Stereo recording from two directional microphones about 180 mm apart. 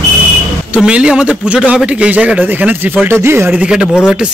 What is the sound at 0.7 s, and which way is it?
A man's voice, 5° right (ahead or behind).